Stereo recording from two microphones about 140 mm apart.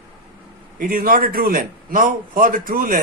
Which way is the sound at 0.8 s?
90° right.